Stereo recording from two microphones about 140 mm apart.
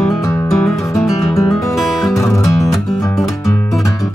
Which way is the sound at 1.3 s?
20° left (ahead or behind).